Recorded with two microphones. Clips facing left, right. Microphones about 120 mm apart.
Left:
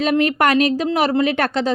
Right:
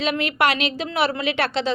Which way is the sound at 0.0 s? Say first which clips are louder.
Left 5 dB; 45° left (ahead or behind).